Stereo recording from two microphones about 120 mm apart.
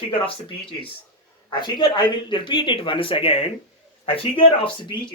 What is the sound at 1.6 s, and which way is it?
Speech, 40° left (ahead or behind).